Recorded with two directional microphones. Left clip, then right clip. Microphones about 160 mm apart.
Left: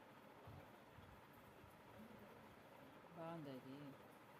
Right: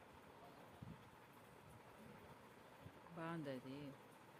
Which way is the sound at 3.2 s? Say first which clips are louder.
Right 4 dB; 50° right (ahead or behind).